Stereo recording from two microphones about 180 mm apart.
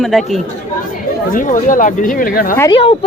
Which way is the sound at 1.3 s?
45° left (ahead or behind).